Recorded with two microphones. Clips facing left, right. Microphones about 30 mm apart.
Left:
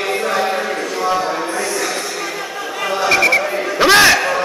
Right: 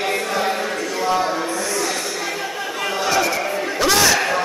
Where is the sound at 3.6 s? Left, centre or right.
Left.